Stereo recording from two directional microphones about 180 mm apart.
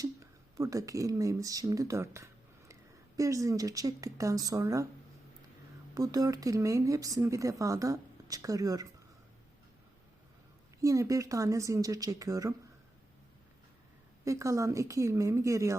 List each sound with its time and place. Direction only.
0.0 s speech: 20° right (ahead or behind)
5.9 s speech: 20° right (ahead or behind)
10.8 s speech: 20° right (ahead or behind)
14.3 s speech: 15° right (ahead or behind)